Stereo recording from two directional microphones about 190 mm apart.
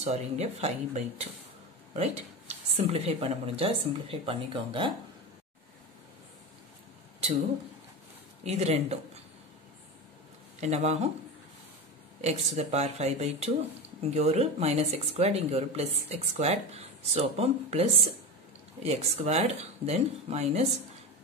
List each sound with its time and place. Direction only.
0.0 s speech: 35° right (ahead or behind)
8.5 s speech: 35° right (ahead or behind)
10.6 s speech: 35° right (ahead or behind)
12.2 s speech: 35° right (ahead or behind)